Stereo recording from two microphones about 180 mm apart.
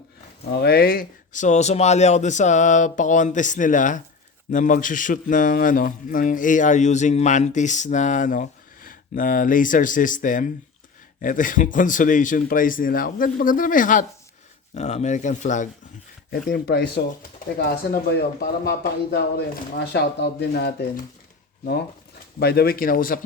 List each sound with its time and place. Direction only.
0.5 s speech: 60° left (ahead or behind); by 15.7 s 45° left (ahead or behind)
16.3 s speech: 60° left (ahead or behind)
22.4 s speech: 60° left (ahead or behind)